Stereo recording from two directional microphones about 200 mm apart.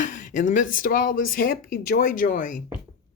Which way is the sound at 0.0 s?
40° left (ahead or behind).